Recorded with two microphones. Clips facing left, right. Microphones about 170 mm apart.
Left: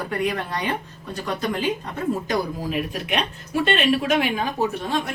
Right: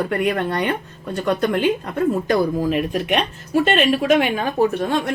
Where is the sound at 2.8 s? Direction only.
45° right (ahead or behind).